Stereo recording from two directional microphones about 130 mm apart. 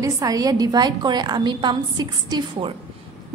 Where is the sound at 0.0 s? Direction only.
30° right (ahead or behind).